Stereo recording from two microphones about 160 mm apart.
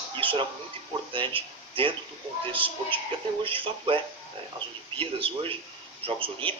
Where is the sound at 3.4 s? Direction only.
35° right (ahead or behind).